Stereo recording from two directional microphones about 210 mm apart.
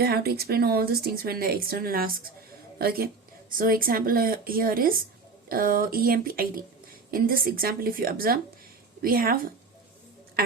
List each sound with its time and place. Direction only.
0.0 s a woman's voice: 50° right (ahead or behind)